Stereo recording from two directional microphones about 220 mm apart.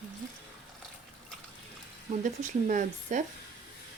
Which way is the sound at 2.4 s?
35° right (ahead or behind).